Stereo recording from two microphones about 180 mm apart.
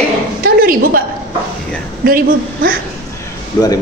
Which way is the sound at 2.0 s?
55° right (ahead or behind).